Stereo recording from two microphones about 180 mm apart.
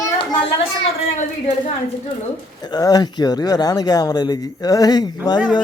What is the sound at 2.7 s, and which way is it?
Speech, 20° left (ahead or behind).